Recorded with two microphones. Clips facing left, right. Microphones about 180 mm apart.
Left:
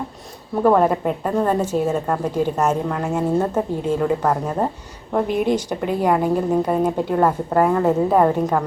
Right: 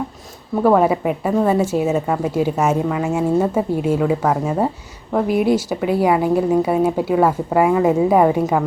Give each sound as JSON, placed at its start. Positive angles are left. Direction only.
{"t": 0.6, "sound": "a woman's voice", "side_deg": -5}